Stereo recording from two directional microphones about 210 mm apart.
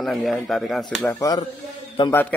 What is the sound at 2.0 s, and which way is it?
Speech, 20° left (ahead or behind).